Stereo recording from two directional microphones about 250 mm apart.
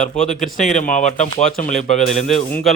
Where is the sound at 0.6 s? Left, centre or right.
Left.